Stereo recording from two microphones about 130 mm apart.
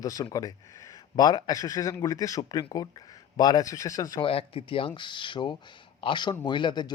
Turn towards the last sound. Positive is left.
turn(degrees=35)  # may be behind; listen again after turning